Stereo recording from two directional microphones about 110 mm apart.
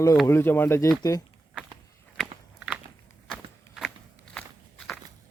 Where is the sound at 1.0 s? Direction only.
35° left (ahead or behind).